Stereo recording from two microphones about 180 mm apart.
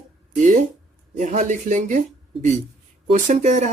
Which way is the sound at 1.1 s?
40° right (ahead or behind).